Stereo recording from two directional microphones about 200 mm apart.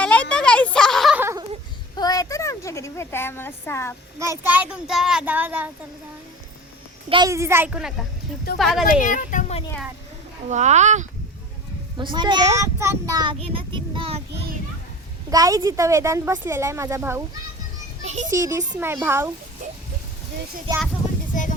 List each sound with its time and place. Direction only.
0.0 s a sound: 5° left (ahead or behind)
1.2 s a sound: 15° right (ahead or behind)
2.0 s a sound: 20° left (ahead or behind)
4.2 s a woman's voice: 10° right (ahead or behind)
7.1 s a woman's voice: 20° right (ahead or behind); by 8.8 s centre (ahead or behind)
8.9 s speech: 40° left (ahead or behind)
10.5 s speech: 35° right (ahead or behind)
11.9 s a child's voice: 20° right (ahead or behind)
15.3 s a woman's voice: 15° right (ahead or behind)
18.0 s a child's voice: 35° right (ahead or behind)
18.3 s a woman's voice: 15° right (ahead or behind)